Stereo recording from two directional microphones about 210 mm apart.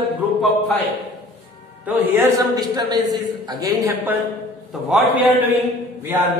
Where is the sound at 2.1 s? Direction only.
15° right (ahead or behind).